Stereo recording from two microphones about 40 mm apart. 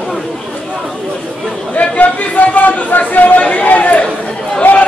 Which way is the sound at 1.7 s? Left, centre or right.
Left.